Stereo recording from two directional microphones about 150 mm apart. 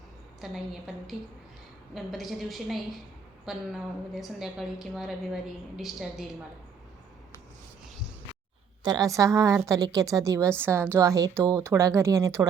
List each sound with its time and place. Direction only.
0.4 s a woman's voice: centre (ahead or behind)
8.8 s a woman's voice: 25° right (ahead or behind)